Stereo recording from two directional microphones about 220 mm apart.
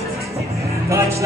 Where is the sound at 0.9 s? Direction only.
15° right (ahead or behind).